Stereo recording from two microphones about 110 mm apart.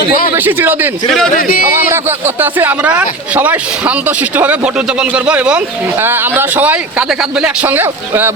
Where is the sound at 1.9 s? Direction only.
20° right (ahead or behind).